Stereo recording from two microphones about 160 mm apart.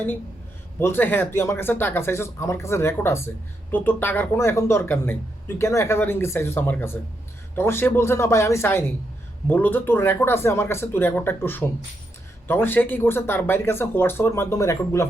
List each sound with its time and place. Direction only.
0.8 s speech: 15° left (ahead or behind)